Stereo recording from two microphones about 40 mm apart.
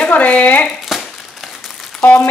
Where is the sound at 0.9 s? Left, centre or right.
Centre.